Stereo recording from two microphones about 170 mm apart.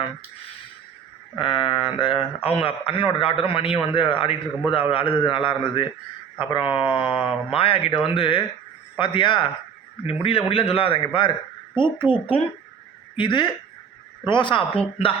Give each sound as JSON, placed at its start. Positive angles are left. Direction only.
{"t": 1.4, "sound": "a man's voice", "side_deg": 30}